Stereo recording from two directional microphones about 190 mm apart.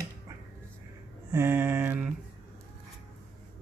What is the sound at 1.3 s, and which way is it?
Mantra, 10° right (ahead or behind).